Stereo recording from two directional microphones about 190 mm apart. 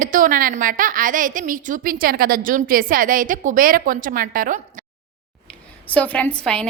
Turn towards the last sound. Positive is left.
turn(degrees=5)  # may be behind; listen again after turning